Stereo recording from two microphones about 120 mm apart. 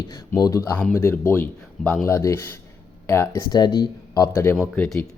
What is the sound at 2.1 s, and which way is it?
Speech, 25° left (ahead or behind).